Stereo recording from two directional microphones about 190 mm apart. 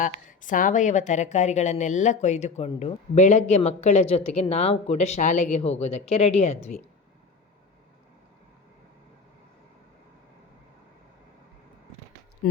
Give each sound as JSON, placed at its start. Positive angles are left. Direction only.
{"t": 0.0, "sound": "speech", "side_deg": 45}
{"t": 12.4, "sound": "speech", "side_deg": 45}